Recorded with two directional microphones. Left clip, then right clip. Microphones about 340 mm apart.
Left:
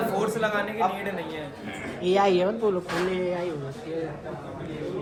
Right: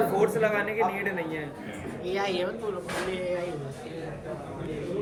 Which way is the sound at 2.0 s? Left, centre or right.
Left.